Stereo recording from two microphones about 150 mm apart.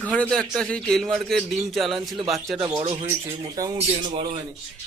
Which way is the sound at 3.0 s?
25° right (ahead or behind).